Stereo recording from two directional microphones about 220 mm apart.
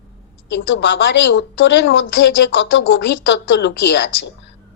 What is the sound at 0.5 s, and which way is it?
A woman's voice, 55° left (ahead or behind).